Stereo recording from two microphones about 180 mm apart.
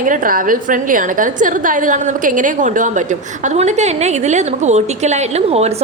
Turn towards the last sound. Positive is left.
turn(degrees=-35)  # may be behind; listen again after turning